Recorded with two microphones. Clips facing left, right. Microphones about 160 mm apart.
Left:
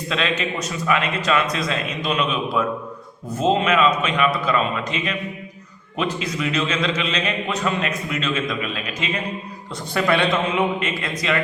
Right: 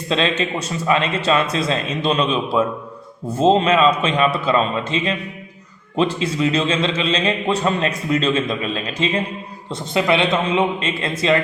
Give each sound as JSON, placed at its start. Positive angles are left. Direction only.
{"t": 0.1, "sound": "a man's voice", "side_deg": -30}
{"t": 9.9, "sound": "a man's voice", "side_deg": -20}